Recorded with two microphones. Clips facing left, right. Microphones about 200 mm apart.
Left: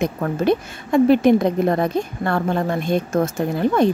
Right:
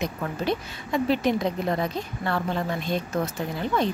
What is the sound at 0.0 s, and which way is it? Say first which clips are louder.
A woman's voice: left 8 dB; 50° left (ahead or behind).